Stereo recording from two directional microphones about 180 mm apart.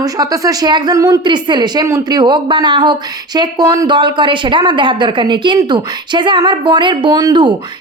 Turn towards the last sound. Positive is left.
turn(degrees=-25)  # may be behind; listen again after turning